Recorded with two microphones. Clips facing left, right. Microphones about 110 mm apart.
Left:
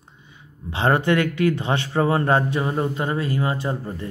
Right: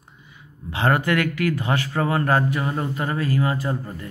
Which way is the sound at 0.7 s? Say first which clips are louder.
Left 1 dB; 25° left (ahead or behind).